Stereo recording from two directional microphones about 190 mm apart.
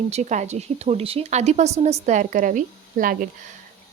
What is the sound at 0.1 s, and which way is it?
Speech, 35° right (ahead or behind).